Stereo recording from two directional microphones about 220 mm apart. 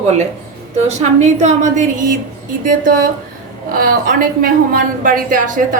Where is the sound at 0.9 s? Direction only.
30° right (ahead or behind).